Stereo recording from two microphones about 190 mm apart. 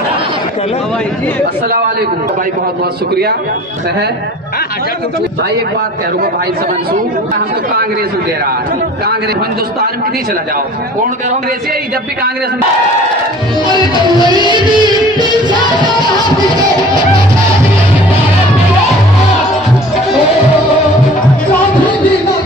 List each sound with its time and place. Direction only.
14.4 s music: 25° right (ahead or behind)